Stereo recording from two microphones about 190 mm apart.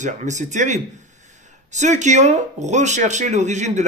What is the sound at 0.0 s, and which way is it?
Speech, 40° right (ahead or behind).